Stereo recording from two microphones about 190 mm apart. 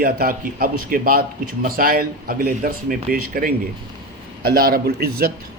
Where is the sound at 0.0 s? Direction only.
50° right (ahead or behind).